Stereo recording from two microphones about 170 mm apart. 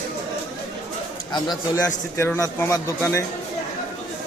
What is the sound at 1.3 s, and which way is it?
Speech, 25° left (ahead or behind).